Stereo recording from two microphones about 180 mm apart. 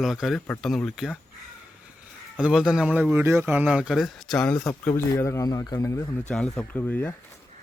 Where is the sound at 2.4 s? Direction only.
5° right (ahead or behind); by 7.1 s 10° left (ahead or behind).